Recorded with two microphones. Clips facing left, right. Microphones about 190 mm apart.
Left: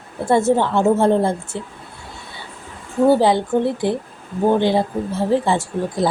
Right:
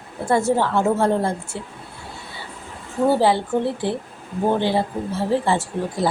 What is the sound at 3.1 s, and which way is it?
A woman's voice, 15° left (ahead or behind).